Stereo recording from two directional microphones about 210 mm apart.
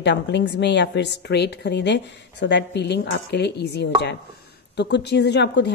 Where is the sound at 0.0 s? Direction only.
55° left (ahead or behind).